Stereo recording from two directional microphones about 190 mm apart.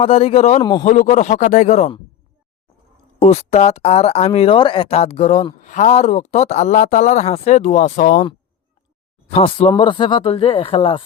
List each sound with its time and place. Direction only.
0.0 s speech: 30° left (ahead or behind)
0.6 s speech: 20° left (ahead or behind)
0.9 s speech: 35° left (ahead or behind)
3.2 s speech: 35° left (ahead or behind)
9.3 s speech: 30° left (ahead or behind)